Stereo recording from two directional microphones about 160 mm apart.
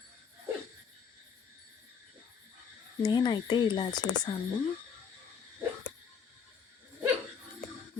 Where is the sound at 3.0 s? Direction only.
25° left (ahead or behind).